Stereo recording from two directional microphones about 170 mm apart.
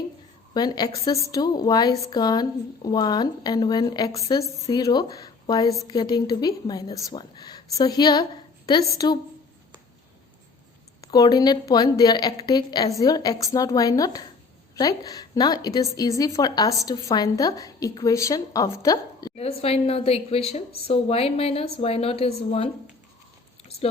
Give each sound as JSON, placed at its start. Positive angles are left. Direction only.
{"t": 0.5, "sound": "a woman's voice", "side_deg": 25}
{"t": 11.0, "sound": "a woman's voice", "side_deg": 20}
{"t": 19.4, "sound": "a woman's voice", "side_deg": 35}